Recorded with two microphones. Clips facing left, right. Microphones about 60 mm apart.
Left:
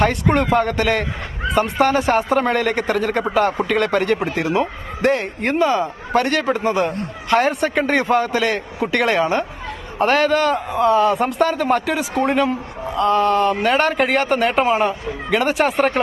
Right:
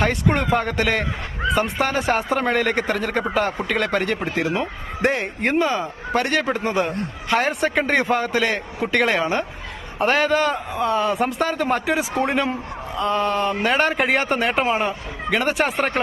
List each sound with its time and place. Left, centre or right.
0.0 s a man's voice: centre